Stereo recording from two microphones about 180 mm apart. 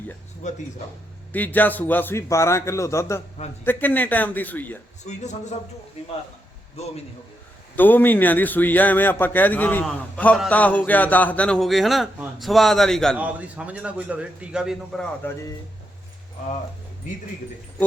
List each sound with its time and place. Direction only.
0.4 s a man's voice: 40° left (ahead or behind)
1.3 s a man's voice: 10° left (ahead or behind)
5.0 s a man's voice: 40° left (ahead or behind)
7.8 s a man's voice: 10° left (ahead or behind)